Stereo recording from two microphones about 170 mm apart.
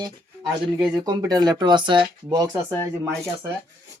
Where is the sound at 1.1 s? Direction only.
25° right (ahead or behind).